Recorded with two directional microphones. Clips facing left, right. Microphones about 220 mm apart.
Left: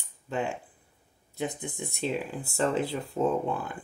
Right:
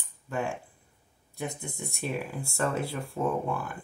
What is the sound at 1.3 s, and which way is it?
Speech, 20° left (ahead or behind).